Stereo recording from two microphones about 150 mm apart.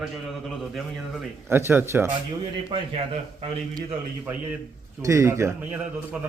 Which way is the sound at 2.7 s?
35° right (ahead or behind).